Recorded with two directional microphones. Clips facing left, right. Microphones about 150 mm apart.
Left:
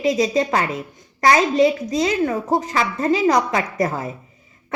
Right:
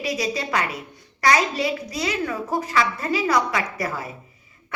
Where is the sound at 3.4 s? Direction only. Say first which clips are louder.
Left 4 dB; 40° left (ahead or behind).